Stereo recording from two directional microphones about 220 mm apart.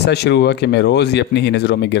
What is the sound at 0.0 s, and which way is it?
Speech, 50° left (ahead or behind).